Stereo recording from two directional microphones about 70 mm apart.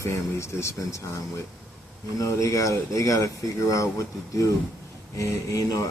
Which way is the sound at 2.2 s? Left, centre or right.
Left.